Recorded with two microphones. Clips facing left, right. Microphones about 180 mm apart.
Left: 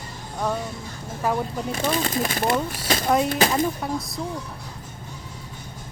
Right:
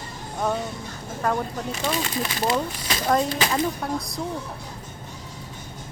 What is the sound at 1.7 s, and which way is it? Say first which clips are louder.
Speech: left 4 dB; 40° left (ahead or behind).